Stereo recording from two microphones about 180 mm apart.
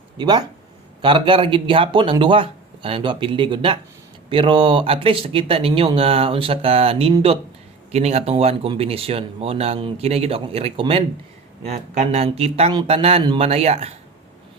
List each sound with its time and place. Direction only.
0.2 s speech: 25° right (ahead or behind)